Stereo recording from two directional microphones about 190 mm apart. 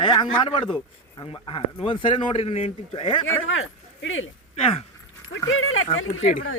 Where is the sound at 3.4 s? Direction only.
90° left.